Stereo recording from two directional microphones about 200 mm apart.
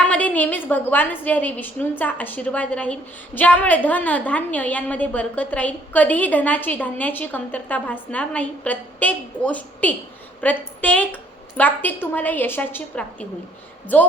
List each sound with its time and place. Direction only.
0.1 s a woman's voice: 5° left (ahead or behind)